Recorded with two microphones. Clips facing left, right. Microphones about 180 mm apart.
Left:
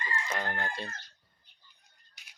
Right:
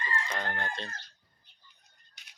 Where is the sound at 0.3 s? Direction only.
10° left (ahead or behind).